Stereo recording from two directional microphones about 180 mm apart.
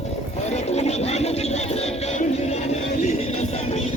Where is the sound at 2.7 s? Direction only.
35° left (ahead or behind).